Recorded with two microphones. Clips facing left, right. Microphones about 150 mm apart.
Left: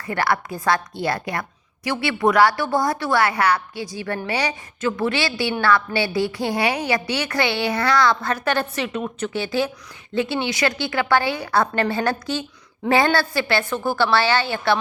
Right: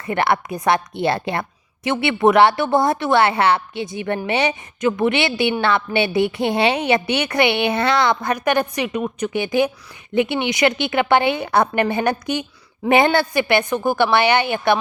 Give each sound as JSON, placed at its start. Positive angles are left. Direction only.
{"t": 0.0, "sound": "a woman's voice", "side_deg": -25}